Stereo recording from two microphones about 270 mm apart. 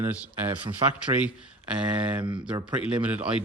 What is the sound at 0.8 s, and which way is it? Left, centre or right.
Speech, centre.